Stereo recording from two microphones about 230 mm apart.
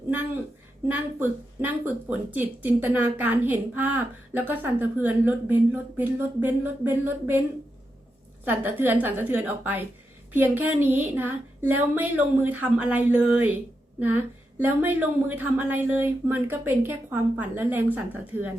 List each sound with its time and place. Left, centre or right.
0.9 s speech: centre
8.4 s speech: centre